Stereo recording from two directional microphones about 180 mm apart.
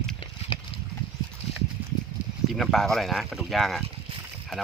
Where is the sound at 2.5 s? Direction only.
Centre (ahead or behind).